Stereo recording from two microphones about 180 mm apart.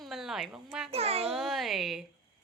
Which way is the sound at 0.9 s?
35° right (ahead or behind).